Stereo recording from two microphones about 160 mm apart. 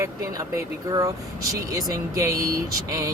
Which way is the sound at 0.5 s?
20° right (ahead or behind).